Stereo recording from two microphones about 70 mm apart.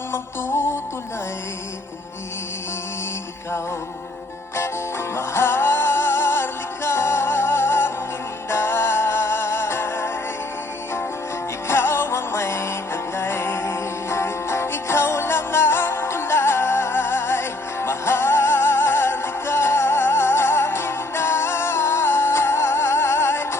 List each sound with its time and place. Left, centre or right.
0.1 s music: left
5.1 s music: left
11.7 s music: left